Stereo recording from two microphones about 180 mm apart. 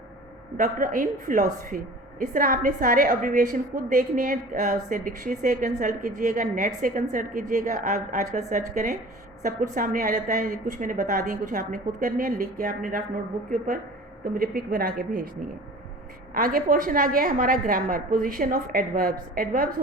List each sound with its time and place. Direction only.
0.5 s a woman's voice: 50° right (ahead or behind)
14.3 s a woman's voice: 55° right (ahead or behind)
16.3 s a woman's voice: 50° right (ahead or behind)